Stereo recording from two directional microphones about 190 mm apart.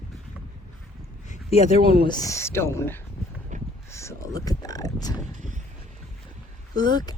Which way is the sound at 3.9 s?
15° left (ahead or behind).